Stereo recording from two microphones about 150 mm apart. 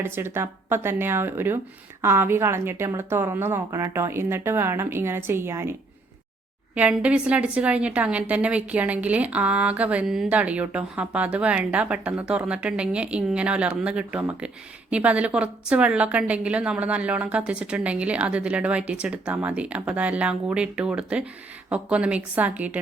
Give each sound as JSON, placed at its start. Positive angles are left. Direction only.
{"t": 0.0, "sound": "a woman's voice", "side_deg": -15}
{"t": 6.7, "sound": "a woman's voice", "side_deg": -10}